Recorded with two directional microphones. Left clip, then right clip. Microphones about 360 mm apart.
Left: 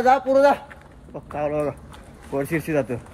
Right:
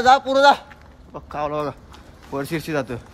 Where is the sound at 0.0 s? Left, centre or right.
Centre.